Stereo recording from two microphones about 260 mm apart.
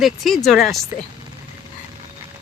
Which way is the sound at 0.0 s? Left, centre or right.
Centre.